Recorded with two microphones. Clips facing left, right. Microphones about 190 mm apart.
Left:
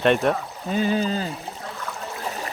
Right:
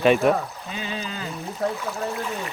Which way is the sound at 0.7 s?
45° left (ahead or behind).